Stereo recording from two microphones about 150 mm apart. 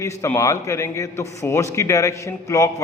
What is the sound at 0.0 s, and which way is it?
A man's voice, 20° left (ahead or behind).